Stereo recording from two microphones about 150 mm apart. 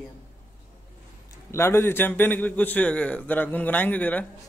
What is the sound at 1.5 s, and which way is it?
A man's voice, 15° left (ahead or behind).